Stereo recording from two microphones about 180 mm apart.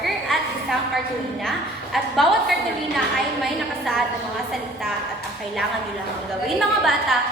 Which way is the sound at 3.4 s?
Centre (ahead or behind).